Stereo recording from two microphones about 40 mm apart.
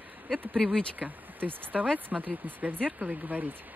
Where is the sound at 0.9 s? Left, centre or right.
Right.